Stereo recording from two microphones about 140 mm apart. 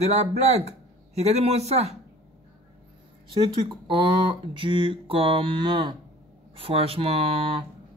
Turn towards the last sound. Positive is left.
turn(degrees=-40)  # may be behind; listen again after turning